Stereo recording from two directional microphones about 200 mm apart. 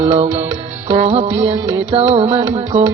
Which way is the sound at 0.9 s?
30° right (ahead or behind).